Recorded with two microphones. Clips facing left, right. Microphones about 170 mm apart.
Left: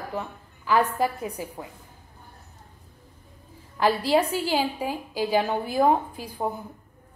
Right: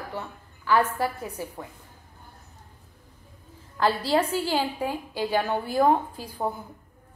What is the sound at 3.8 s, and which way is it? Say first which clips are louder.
A woman's voice: left 2 dB; 15° left (ahead or behind).